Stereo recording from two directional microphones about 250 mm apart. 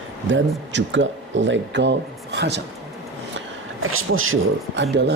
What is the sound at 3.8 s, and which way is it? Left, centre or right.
Speech, right.